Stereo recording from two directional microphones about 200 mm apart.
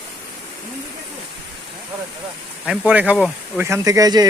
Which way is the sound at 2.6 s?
5° right (ahead or behind).